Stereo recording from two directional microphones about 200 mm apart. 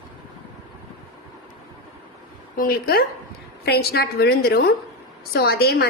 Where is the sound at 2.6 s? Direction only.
50° left (ahead or behind).